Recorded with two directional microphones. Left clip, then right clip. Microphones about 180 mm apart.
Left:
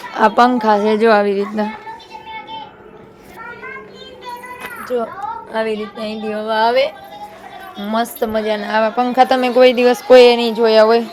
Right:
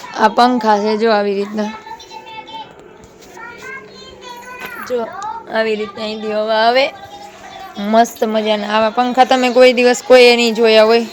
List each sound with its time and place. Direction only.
0.1 s a woman's voice: centre (ahead or behind)
5.5 s speech: 45° right (ahead or behind)
7.8 s a woman's voice: 30° right (ahead or behind); by 11.0 s centre (ahead or behind)